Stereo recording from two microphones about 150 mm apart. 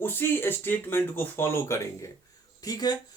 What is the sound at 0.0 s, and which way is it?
Speech, 15° left (ahead or behind).